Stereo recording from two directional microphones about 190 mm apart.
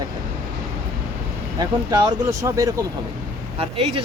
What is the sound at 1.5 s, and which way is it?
Speech, 20° right (ahead or behind).